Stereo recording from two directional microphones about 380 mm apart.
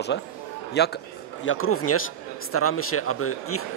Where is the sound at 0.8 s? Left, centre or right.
Left.